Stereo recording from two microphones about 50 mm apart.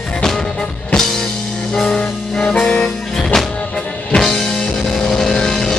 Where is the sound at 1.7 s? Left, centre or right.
Centre.